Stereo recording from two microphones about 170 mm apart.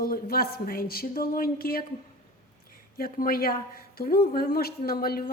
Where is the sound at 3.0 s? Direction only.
60° left (ahead or behind).